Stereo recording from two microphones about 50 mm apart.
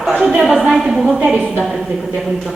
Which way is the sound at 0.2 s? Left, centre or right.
Centre.